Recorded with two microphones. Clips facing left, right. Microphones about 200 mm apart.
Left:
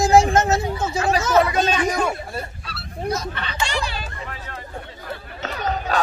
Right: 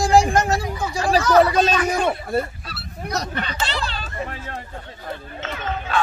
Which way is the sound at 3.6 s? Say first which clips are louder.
Left 1 dB; 15° left (ahead or behind).